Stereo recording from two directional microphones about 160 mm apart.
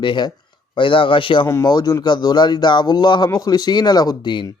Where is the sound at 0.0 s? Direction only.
30° left (ahead or behind).